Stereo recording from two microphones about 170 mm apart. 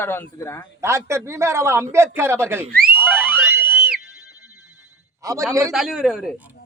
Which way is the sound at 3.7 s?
60° right (ahead or behind).